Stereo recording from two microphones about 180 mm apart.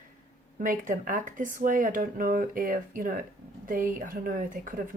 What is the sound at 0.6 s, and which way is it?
Speech, 50° right (ahead or behind).